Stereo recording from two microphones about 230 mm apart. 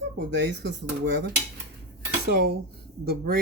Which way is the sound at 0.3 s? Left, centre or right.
Right.